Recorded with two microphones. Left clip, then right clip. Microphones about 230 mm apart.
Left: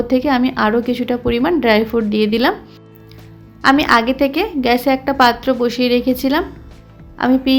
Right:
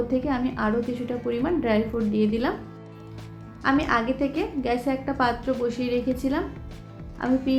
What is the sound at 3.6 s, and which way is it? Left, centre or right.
A woman's voice, left.